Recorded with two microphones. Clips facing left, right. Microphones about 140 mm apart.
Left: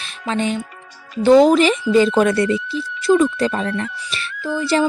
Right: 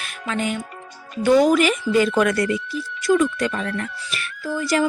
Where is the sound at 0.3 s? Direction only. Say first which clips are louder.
Left 4 dB; 30° left (ahead or behind).